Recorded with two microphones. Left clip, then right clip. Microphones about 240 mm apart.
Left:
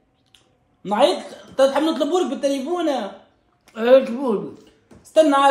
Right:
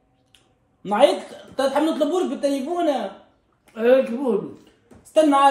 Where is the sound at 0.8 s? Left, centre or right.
Centre.